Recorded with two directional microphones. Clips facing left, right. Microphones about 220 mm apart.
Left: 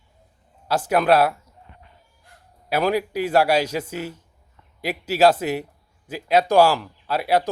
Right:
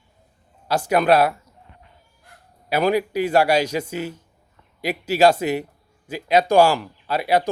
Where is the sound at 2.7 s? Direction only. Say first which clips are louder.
Right 2 dB; centre (ahead or behind).